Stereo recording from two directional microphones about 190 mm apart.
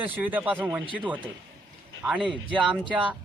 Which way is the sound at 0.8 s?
25° right (ahead or behind).